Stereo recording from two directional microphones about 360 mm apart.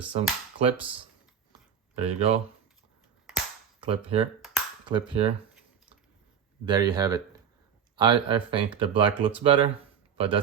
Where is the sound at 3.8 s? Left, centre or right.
Centre.